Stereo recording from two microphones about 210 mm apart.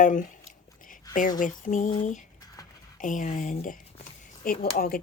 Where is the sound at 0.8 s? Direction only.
40° left (ahead or behind).